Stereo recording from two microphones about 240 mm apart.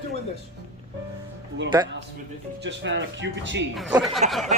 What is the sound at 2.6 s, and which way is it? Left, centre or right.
Speech, right.